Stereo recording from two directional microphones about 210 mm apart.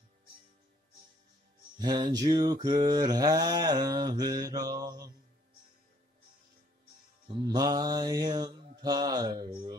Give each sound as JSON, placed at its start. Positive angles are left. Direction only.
{"t": 1.8, "sound": "mantra", "side_deg": -20}
{"t": 7.2, "sound": "mantra", "side_deg": -20}